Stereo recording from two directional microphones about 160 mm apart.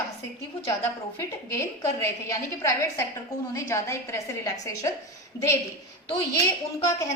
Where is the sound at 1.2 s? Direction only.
15° left (ahead or behind).